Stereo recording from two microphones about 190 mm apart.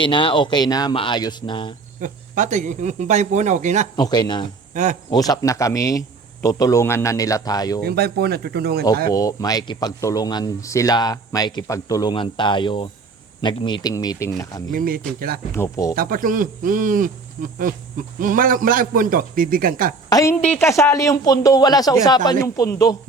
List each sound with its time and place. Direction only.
0.0 s speech: 25° left (ahead or behind)
2.0 s speech: 40° right (ahead or behind)
3.9 s speech: 20° left (ahead or behind)
4.7 s speech: 40° right (ahead or behind)
5.1 s speech: 20° left (ahead or behind)
7.9 s speech: 55° right (ahead or behind)
9.1 s speech: 20° left (ahead or behind)
14.7 s speech: 45° right (ahead or behind)
15.5 s speech: 15° left (ahead or behind)
16.0 s speech: 50° right (ahead or behind)
20.1 s a woman's voice: 20° left (ahead or behind)